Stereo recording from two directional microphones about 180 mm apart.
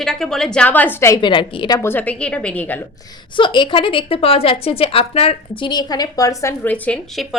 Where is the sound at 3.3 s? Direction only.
25° left (ahead or behind).